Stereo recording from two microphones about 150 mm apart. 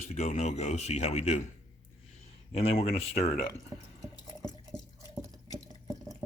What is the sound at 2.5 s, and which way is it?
Speech, 50° left (ahead or behind).